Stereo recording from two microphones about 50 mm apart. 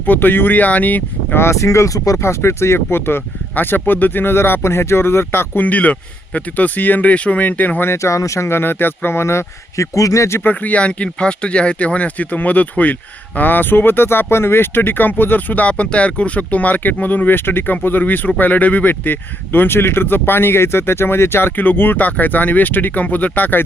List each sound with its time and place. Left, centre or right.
0.0 s speech: left
1.4 s speech: left
5.6 s speech: left
7.8 s speech: left
10.4 s speech: left
19.5 s speech: left